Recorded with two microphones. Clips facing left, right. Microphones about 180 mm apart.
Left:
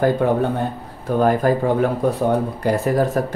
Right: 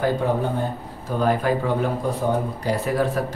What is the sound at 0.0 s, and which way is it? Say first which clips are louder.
Speech: left 4 dB; 60° left (ahead or behind).